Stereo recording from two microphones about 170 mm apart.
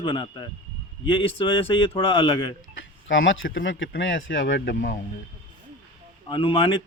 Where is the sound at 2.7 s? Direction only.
90° left.